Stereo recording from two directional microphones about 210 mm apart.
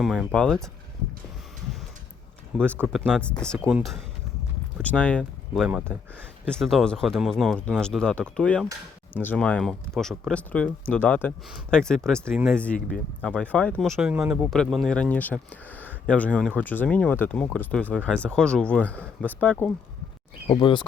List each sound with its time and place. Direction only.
0.0 s speech: centre (ahead or behind)
2.7 s speech: 5° right (ahead or behind)
20.5 s speech: 20° left (ahead or behind)